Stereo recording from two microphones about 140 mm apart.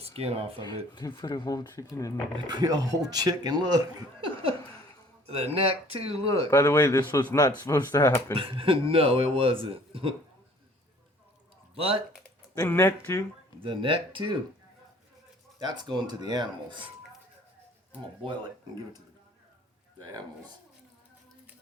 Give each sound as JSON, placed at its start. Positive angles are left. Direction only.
{"t": 0.0, "sound": "speech", "side_deg": -45}
{"t": 0.6, "sound": "speech", "side_deg": 30}
{"t": 2.5, "sound": "speech", "side_deg": -30}
{"t": 5.2, "sound": "speech", "side_deg": -45}
{"t": 6.5, "sound": "speech", "side_deg": 20}
{"t": 8.4, "sound": "a man's voice", "side_deg": -40}
{"t": 11.8, "sound": "speech", "side_deg": -45}
{"t": 12.5, "sound": "speech", "side_deg": 15}
{"t": 13.6, "sound": "a man's voice", "side_deg": -40}
{"t": 15.5, "sound": "a man's voice", "side_deg": -30}